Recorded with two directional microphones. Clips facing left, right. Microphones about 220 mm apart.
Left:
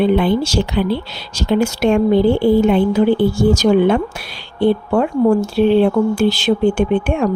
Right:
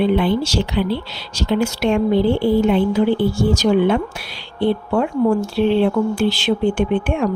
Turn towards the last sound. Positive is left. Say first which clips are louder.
# left 2 dB
turn(degrees=45)  # may be behind; listen again after turning